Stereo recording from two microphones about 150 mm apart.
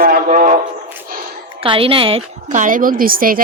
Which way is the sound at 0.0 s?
70° right (ahead or behind).